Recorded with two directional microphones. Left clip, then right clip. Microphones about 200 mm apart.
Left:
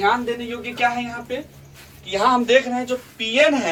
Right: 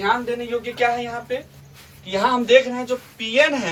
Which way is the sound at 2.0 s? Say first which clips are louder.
Left 2 dB; 15° left (ahead or behind).